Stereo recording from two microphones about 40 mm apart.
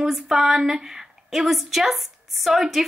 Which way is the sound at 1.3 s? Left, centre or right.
Centre.